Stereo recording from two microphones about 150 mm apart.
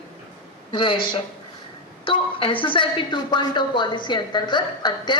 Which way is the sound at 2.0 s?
35° left (ahead or behind).